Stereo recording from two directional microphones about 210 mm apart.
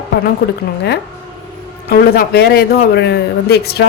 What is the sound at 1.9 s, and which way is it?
A man's voice, 45° left (ahead or behind).